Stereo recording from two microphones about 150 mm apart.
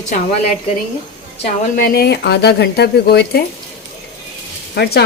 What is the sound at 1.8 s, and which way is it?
Speech, 90° left.